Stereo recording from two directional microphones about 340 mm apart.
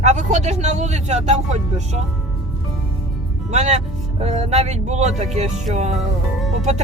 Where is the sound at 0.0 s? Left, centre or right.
Centre.